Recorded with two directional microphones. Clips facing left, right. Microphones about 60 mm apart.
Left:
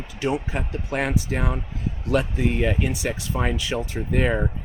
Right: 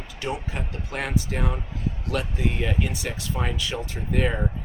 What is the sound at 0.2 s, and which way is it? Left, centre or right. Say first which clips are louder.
Speech: left 5 dB; left.